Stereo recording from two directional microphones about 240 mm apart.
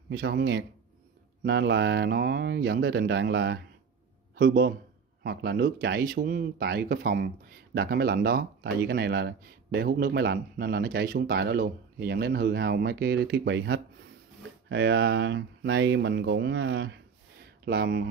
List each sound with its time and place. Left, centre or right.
0.1 s speech: right